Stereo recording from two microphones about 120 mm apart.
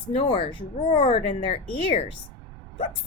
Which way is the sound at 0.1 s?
45° left (ahead or behind).